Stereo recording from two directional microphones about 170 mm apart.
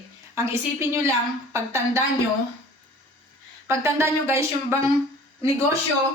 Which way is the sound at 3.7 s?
15° right (ahead or behind).